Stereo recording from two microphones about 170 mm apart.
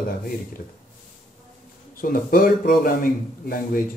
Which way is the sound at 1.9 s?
60° left (ahead or behind).